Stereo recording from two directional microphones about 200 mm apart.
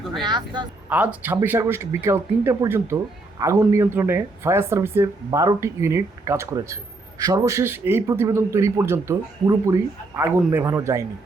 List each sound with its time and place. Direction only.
0.1 s speech: 20° right (ahead or behind)
0.9 s a man's voice: 10° right (ahead or behind)